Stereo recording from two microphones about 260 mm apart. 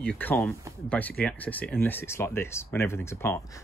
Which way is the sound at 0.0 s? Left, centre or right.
Centre.